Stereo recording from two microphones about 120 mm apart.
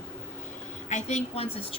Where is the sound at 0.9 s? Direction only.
65° left (ahead or behind).